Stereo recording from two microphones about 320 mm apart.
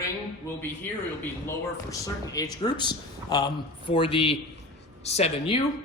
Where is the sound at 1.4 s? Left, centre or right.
Centre.